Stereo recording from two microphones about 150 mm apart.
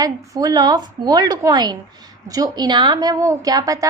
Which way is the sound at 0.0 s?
25° right (ahead or behind).